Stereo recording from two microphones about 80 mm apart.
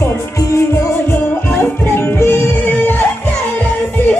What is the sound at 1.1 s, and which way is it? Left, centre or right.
Music, left.